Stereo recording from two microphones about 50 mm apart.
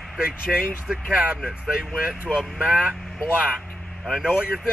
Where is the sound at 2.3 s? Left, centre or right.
Centre.